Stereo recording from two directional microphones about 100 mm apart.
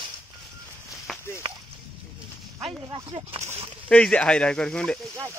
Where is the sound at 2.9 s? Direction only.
55° right (ahead or behind).